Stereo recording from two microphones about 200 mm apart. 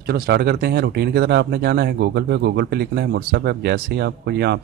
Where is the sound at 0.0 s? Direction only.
55° right (ahead or behind).